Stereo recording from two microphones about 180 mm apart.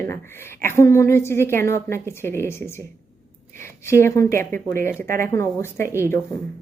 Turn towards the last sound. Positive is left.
turn(degrees=15)  # may be behind; listen again after turning